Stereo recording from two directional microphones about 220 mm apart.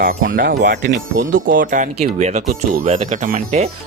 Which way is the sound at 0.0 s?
40° right (ahead or behind).